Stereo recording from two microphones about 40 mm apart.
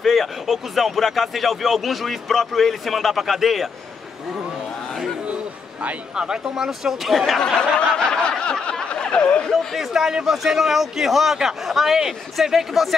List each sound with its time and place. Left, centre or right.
0.0 s speech: centre
6.1 s speech: centre
7.3 s snicker: centre
8.8 s a sound: left
9.8 s speech: centre